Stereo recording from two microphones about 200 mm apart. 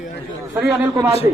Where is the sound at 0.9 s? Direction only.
15° right (ahead or behind).